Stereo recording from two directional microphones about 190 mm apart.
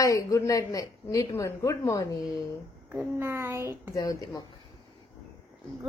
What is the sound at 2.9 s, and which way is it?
A child's voice, 15° right (ahead or behind).